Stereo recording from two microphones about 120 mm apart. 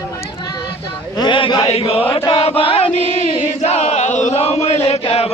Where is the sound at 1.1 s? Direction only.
45° left (ahead or behind).